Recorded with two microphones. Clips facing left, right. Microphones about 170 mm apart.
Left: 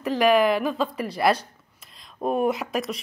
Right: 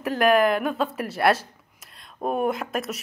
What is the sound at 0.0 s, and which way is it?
A woman's voice, centre (ahead or behind).